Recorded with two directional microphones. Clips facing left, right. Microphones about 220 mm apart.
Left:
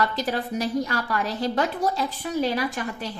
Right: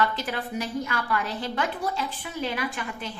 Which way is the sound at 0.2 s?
40° left (ahead or behind).